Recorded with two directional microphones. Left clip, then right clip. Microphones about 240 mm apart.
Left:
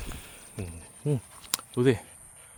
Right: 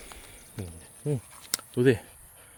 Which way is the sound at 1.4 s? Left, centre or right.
Centre.